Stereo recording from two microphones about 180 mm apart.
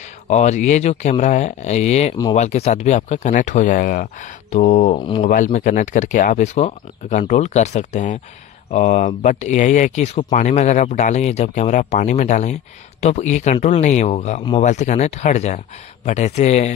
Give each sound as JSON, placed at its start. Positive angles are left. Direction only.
{"t": 0.3, "sound": "speech", "side_deg": 40}